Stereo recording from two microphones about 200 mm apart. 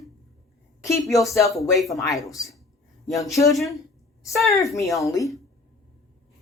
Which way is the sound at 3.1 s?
Centre (ahead or behind).